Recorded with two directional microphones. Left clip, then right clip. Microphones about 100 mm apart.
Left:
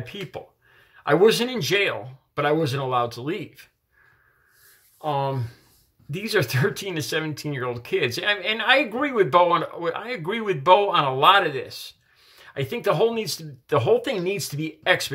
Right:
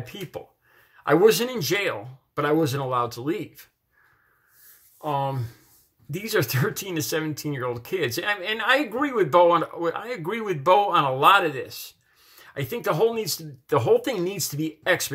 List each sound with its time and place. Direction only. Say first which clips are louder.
0.0 s speech: left 1 dB; 10° left (ahead or behind)
5.0 s speech: left 1 dB; 15° left (ahead or behind)